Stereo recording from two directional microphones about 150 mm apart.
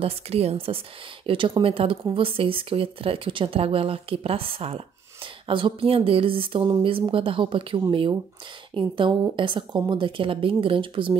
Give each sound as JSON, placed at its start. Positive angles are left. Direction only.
{"t": 0.0, "sound": "a woman's voice", "side_deg": -40}